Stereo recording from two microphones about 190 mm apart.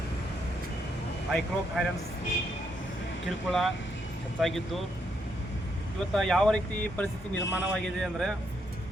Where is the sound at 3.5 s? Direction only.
Centre (ahead or behind).